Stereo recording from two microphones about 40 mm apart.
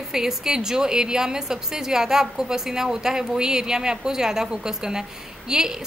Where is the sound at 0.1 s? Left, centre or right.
Centre.